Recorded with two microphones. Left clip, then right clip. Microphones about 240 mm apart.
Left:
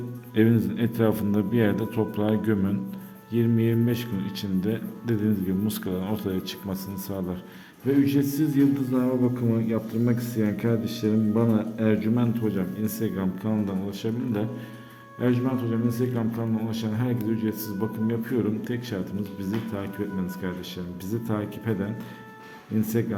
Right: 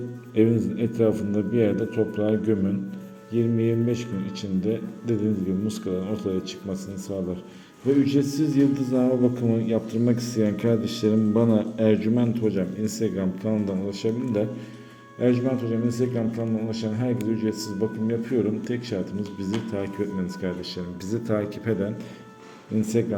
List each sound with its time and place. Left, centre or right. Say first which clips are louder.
0.3 s a man's voice: right 1 dB; left